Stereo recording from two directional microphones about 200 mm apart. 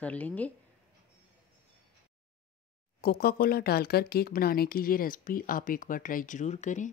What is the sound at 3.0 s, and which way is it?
Speech, 50° left (ahead or behind).